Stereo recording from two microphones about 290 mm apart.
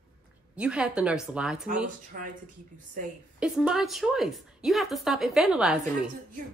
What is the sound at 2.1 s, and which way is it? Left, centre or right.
Speech, right.